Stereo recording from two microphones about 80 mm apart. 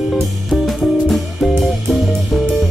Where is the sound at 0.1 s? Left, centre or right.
Centre.